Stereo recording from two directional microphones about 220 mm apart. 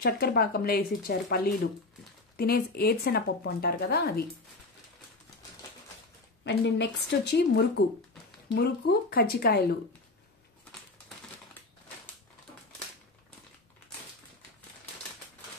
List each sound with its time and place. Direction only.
0.0 s speech: 45° left (ahead or behind)
6.4 s speech: 50° left (ahead or behind)